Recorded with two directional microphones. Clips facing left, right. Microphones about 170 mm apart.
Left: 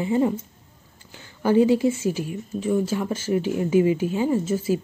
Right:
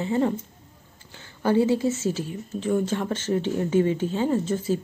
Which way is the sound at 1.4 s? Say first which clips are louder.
Left 3 dB; 15° left (ahead or behind).